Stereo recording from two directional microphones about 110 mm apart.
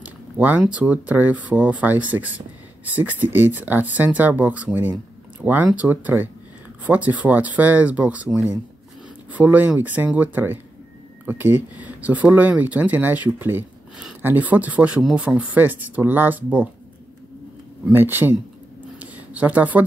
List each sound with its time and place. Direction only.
0.0 s speech: 15° right (ahead or behind)
17.8 s speech: 20° right (ahead or behind)
18.9 s a sound: 15° right (ahead or behind)